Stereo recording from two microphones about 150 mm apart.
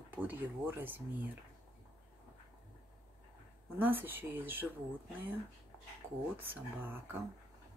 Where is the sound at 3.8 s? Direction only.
15° right (ahead or behind).